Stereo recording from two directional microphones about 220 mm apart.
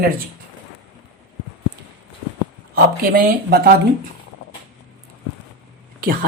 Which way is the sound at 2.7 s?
45° right (ahead or behind).